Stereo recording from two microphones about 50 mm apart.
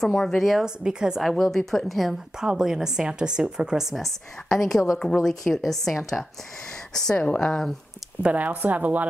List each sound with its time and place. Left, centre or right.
0.0 s a woman's voice: centre
0.8 s speech: centre
1.2 s a woman's voice: centre
2.4 s speech: centre
3.9 s a woman's voice: centre
8.2 s a woman's voice: right